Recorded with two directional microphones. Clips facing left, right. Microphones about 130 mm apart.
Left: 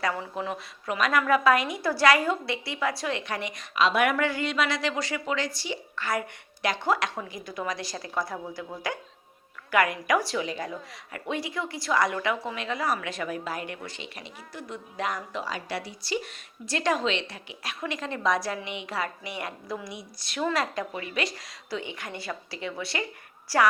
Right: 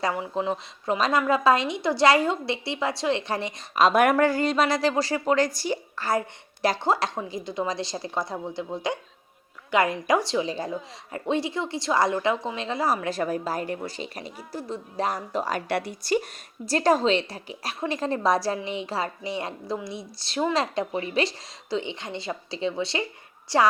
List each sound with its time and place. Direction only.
0.0 s a woman's voice: 20° right (ahead or behind)
3.8 s a woman's voice: 45° right (ahead or behind); by 23.6 s 25° right (ahead or behind)